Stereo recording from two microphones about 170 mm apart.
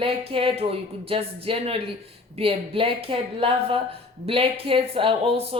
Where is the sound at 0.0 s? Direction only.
35° right (ahead or behind).